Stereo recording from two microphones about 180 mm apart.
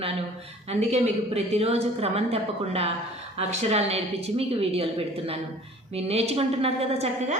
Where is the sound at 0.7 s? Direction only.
40° right (ahead or behind).